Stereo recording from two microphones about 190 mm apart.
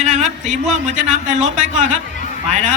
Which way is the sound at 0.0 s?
40° right (ahead or behind).